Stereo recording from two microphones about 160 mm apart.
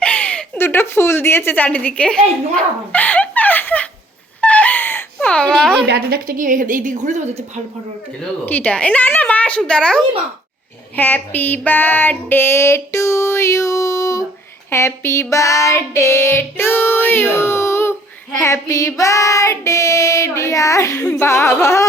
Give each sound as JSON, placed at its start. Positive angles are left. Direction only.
{"t": 0.0, "sound": "a woman's voice", "side_deg": 10}
{"t": 2.9, "sound": "a sound", "side_deg": 10}
{"t": 4.4, "sound": "wail", "side_deg": 10}
{"t": 5.9, "sound": "a woman's voice", "side_deg": -75}
{"t": 8.4, "sound": "child singing", "side_deg": 10}
{"t": 10.9, "sound": "a sound", "side_deg": 10}
{"t": 14.7, "sound": "child singing", "side_deg": 15}